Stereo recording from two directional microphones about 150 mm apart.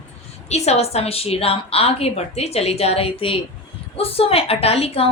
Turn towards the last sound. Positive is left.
turn(degrees=40)  # may be behind; listen again after turning